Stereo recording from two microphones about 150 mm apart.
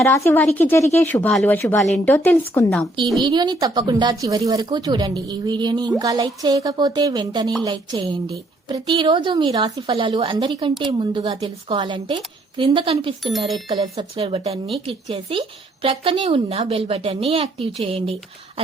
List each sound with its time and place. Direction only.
0.3 s speech: 10° left (ahead or behind)
3.2 s a woman's voice: 30° right (ahead or behind)